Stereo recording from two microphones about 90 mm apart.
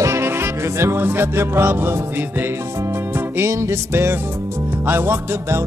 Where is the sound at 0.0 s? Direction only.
30° right (ahead or behind).